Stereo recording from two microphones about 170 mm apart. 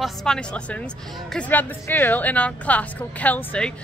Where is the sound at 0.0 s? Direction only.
5° left (ahead or behind).